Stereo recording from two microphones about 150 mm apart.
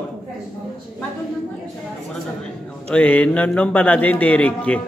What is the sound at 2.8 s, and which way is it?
Speech, 10° left (ahead or behind).